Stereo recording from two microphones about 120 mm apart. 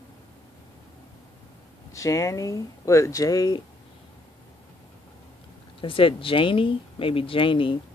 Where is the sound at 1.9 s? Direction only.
25° left (ahead or behind).